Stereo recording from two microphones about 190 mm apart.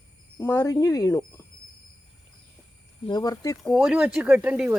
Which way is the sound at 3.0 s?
20° left (ahead or behind).